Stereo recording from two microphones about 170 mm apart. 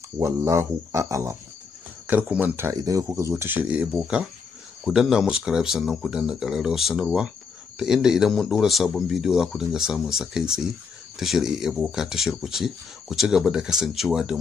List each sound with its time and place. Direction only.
0.2 s speech: 15° right (ahead or behind)